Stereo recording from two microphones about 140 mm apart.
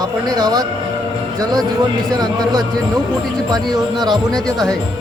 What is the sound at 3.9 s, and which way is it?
Speech, 30° right (ahead or behind).